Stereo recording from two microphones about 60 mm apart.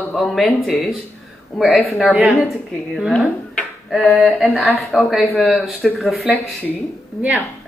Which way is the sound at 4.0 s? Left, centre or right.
Left.